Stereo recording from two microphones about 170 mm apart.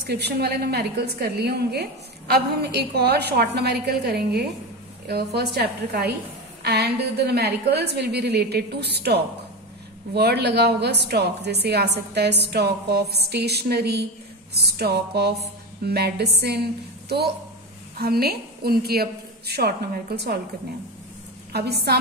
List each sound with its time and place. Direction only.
0.0 s a woman's voice: 70° right (ahead or behind)
17.9 s a woman's voice: 65° right (ahead or behind)
21.5 s a woman's voice: 70° right (ahead or behind)